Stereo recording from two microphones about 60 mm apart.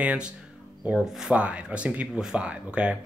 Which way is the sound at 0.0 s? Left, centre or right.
Right.